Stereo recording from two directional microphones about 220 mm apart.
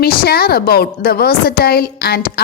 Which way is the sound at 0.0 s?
45° left (ahead or behind).